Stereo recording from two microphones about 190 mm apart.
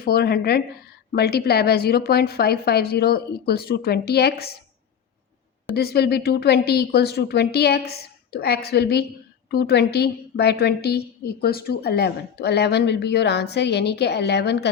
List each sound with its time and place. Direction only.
0.0 s a woman's voice: 55° left (ahead or behind)
5.7 s a woman's voice: 55° left (ahead or behind)